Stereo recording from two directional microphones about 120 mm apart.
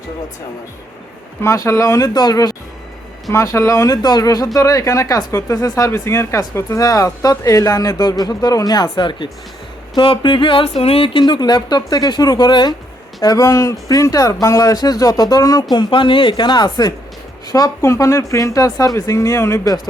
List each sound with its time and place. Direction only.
1.4 s speech: 25° left (ahead or behind)